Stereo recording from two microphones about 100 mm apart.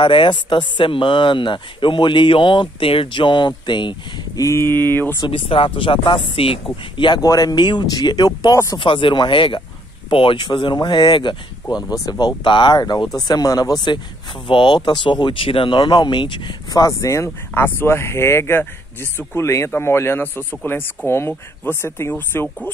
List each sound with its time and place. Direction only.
0.0 s speech: 55° left (ahead or behind)
4.4 s speech: 25° left (ahead or behind)
5.2 s speech: 65° left (ahead or behind)
7.2 s speech: 40° left (ahead or behind)
8.7 s speech: 60° left (ahead or behind)
11.7 s speech: 40° left (ahead or behind)
14.5 s speech: 55° left (ahead or behind)
16.7 s speech: 35° left (ahead or behind)